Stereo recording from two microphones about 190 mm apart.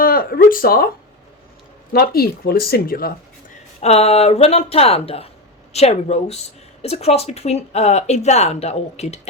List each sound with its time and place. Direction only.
0.0 s a sound: 50° left (ahead or behind)
1.9 s speech: 55° left (ahead or behind)
3.8 s speech: 35° left (ahead or behind)